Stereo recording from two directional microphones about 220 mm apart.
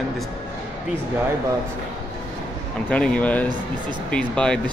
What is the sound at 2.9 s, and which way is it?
Speech, 5° left (ahead or behind).